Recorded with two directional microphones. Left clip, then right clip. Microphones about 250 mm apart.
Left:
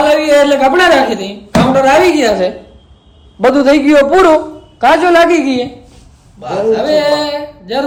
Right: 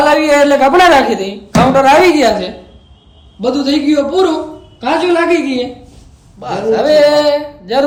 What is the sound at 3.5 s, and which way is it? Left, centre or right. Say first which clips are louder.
Speech: left 5 dB; left.